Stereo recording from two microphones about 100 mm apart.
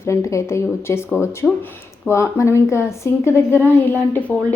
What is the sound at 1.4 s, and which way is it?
Speech, centre (ahead or behind).